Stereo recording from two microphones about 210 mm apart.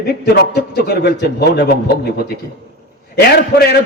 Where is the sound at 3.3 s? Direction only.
50° left (ahead or behind).